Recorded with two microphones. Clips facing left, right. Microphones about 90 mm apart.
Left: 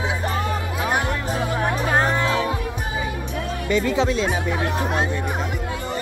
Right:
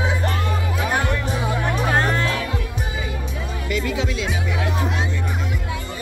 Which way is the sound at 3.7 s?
35° left (ahead or behind).